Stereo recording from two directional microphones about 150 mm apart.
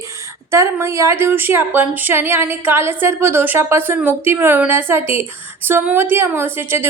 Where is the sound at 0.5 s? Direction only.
20° right (ahead or behind).